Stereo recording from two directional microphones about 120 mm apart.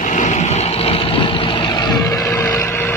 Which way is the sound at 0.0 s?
90° left.